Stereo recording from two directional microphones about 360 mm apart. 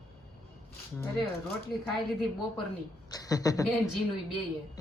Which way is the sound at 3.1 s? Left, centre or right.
Centre.